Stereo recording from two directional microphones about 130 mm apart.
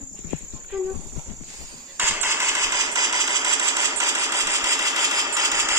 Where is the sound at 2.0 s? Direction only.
15° right (ahead or behind).